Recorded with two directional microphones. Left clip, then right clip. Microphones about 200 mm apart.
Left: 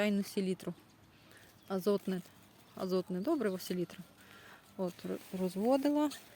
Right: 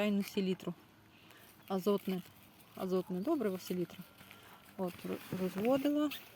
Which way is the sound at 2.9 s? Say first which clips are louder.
Left 1 dB; 10° left (ahead or behind).